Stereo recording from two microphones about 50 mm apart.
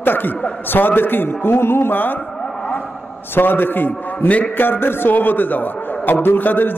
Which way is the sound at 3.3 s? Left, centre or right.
Left.